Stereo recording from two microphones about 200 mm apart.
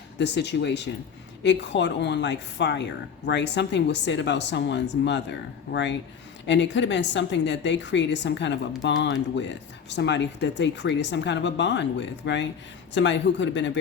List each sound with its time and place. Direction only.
0.2 s speech: 60° left (ahead or behind)